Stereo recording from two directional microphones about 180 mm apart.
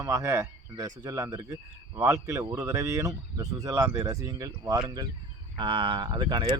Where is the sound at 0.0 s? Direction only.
15° right (ahead or behind).